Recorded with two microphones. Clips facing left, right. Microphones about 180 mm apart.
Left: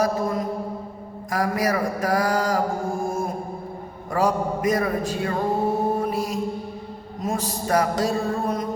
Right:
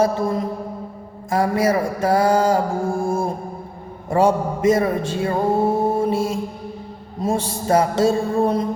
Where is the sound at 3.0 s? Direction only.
30° right (ahead or behind).